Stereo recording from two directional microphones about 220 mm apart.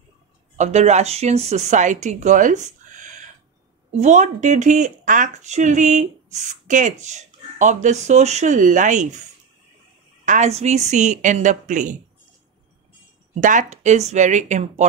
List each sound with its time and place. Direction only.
0.6 s speech: 30° right (ahead or behind)
10.2 s speech: 35° right (ahead or behind)
13.4 s speech: 35° right (ahead or behind)